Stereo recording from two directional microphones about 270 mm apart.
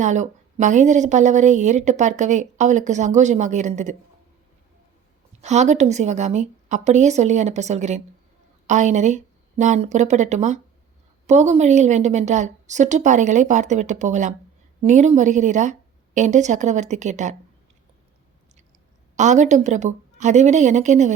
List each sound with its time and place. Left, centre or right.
0.0 s a woman's voice: right
5.4 s a woman's voice: right
19.1 s a woman's voice: right